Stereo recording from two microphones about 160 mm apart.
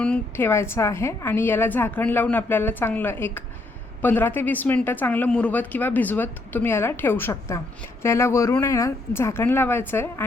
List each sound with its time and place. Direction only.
0.0 s speech: 10° left (ahead or behind)